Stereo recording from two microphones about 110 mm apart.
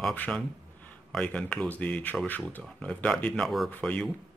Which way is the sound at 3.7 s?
15° left (ahead or behind).